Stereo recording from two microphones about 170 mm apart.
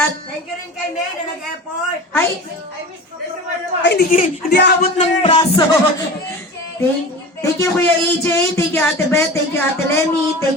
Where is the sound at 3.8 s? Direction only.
70° left (ahead or behind).